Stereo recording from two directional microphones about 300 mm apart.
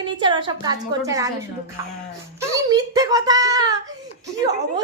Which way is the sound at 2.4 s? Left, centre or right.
Centre.